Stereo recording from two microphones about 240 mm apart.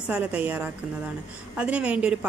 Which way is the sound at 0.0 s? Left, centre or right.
Centre.